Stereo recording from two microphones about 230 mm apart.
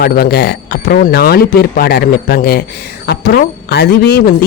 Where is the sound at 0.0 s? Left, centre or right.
Left.